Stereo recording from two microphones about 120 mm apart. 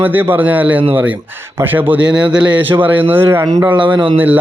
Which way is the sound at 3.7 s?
45° right (ahead or behind).